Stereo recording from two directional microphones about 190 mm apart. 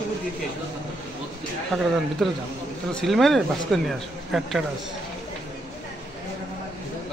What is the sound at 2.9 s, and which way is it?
Speech, centre (ahead or behind).